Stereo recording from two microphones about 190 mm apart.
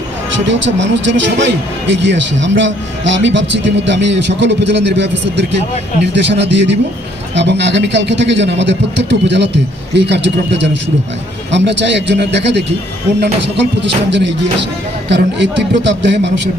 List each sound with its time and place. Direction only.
0.4 s speech: 75° right (ahead or behind)